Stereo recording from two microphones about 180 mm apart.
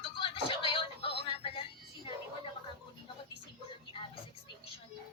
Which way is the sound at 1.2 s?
30° left (ahead or behind).